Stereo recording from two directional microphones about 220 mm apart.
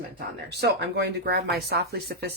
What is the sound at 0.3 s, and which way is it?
Speech, 50° right (ahead or behind).